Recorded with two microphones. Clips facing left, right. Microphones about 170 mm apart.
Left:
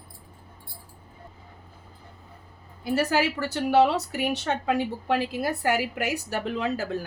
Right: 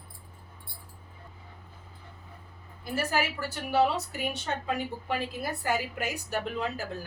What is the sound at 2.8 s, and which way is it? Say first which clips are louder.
Speech: left 6 dB; 75° left (ahead or behind).